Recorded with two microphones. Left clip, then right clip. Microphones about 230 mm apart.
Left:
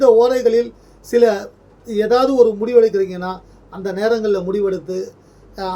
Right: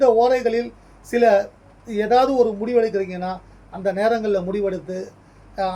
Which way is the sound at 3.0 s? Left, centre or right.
Centre.